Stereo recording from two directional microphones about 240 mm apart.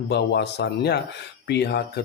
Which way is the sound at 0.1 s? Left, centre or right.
Left.